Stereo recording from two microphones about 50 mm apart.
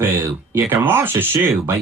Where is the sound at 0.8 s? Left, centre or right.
Right.